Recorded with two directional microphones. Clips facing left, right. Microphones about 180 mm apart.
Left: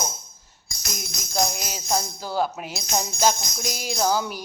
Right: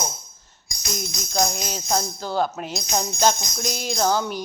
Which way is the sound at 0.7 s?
15° right (ahead or behind).